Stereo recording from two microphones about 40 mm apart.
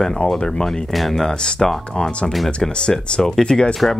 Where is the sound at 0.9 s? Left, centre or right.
Centre.